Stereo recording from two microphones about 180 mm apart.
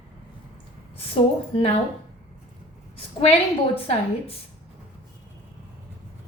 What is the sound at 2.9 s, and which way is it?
A woman's voice, 35° left (ahead or behind).